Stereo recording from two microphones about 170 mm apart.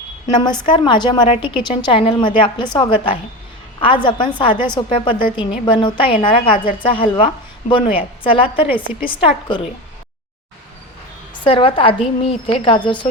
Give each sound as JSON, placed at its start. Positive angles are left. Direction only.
{"t": 0.3, "sound": "a woman's voice", "side_deg": 25}
{"t": 11.4, "sound": "a woman's voice", "side_deg": 30}